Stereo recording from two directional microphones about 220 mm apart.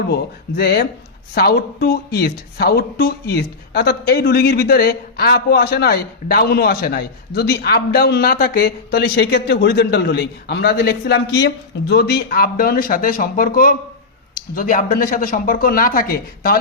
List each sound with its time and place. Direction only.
0.1 s speech: 45° left (ahead or behind)